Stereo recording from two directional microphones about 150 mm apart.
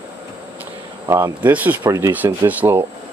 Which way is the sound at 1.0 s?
20° right (ahead or behind).